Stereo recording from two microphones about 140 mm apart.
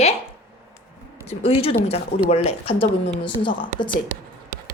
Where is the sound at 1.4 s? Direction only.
45° left (ahead or behind).